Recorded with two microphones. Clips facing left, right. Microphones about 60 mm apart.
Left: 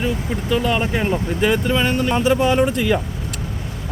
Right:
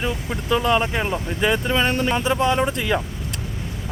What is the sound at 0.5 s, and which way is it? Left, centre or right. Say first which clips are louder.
Speech: right 1 dB; centre.